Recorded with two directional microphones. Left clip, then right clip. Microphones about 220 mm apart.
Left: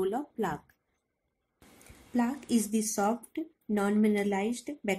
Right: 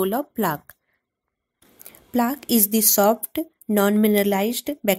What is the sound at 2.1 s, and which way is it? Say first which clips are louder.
A woman's voice: right 9 dB; 45° right (ahead or behind).